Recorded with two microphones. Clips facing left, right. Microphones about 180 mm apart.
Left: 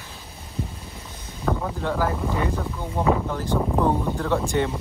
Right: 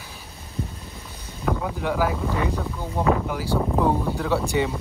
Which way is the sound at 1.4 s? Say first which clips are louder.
Even; 5° right (ahead or behind).